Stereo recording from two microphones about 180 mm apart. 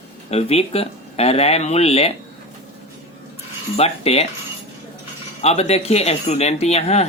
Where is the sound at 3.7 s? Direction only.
35° left (ahead or behind).